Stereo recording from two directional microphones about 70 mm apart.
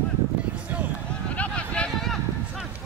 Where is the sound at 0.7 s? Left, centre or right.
Right.